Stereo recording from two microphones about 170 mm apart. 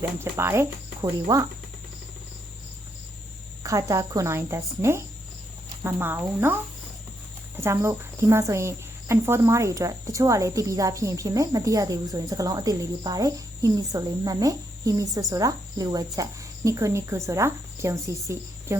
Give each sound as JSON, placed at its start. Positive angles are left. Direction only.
{"t": 0.2, "sound": "speech", "side_deg": -15}
{"t": 3.6, "sound": "speech", "side_deg": -20}
{"t": 7.6, "sound": "speech", "side_deg": -15}